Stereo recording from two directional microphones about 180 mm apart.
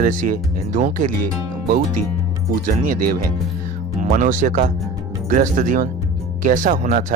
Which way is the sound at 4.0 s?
45° right (ahead or behind).